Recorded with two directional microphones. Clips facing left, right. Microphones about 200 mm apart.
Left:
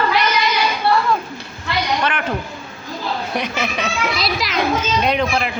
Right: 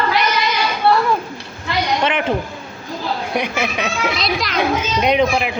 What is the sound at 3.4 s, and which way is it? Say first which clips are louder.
Speech: right 3 dB; 10° right (ahead or behind).